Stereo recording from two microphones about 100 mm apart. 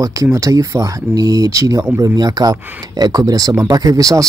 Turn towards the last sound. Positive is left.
turn(degrees=-35)  # may be behind; listen again after turning